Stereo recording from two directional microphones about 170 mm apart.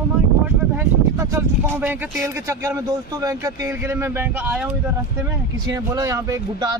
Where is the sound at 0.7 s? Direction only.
15° right (ahead or behind).